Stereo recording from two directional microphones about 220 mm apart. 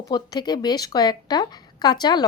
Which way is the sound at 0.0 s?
15° left (ahead or behind).